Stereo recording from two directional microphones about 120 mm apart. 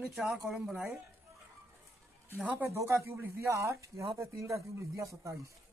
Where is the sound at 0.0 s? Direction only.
5° right (ahead or behind).